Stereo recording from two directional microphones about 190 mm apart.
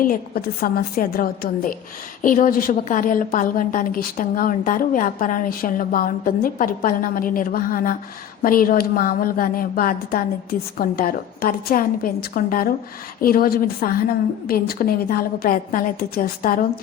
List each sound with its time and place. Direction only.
0.0 s a woman's voice: 50° left (ahead or behind)